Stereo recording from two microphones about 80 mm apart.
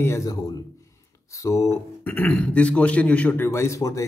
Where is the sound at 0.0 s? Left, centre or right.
Left.